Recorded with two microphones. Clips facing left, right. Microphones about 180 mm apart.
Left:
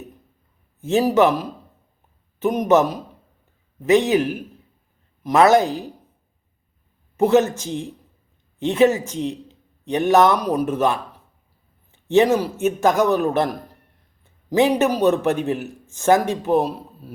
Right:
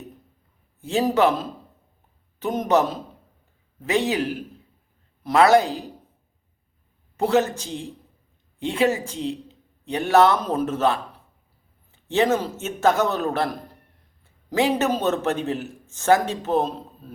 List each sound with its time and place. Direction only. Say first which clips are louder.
0.8 s a man's voice: left 3 dB; 20° left (ahead or behind)
7.2 s a woman's voice: left 4 dB; 20° left (ahead or behind)
8.5 s a woman's voice: left 5 dB; 20° left (ahead or behind)
14.5 s a man's voice: left 4 dB; 20° left (ahead or behind)